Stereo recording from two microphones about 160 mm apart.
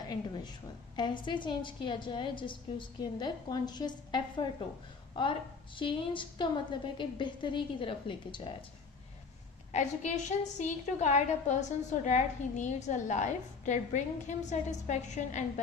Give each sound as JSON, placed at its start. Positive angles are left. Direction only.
{"t": 0.1, "sound": "a sound", "side_deg": 25}
{"t": 0.9, "sound": "a woman's voice", "side_deg": 30}
{"t": 9.7, "sound": "a woman's voice", "side_deg": 50}